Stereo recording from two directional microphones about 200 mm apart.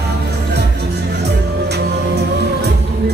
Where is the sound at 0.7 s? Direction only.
55° right (ahead or behind).